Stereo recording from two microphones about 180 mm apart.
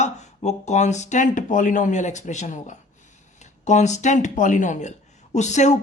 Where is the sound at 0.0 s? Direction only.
40° left (ahead or behind).